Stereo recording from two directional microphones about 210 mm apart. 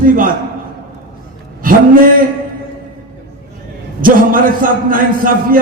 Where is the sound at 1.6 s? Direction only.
40° right (ahead or behind).